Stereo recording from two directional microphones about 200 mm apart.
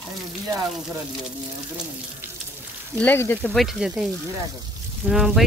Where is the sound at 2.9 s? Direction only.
10° left (ahead or behind).